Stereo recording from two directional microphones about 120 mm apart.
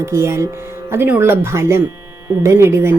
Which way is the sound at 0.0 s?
20° right (ahead or behind).